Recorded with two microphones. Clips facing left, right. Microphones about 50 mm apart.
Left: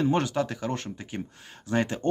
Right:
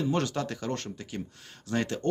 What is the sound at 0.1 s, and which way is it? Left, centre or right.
Speech, centre.